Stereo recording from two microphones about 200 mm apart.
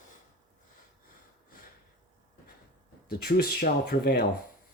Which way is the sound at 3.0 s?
50° left (ahead or behind).